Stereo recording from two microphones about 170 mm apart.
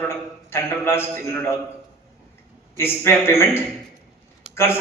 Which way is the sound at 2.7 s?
15° left (ahead or behind).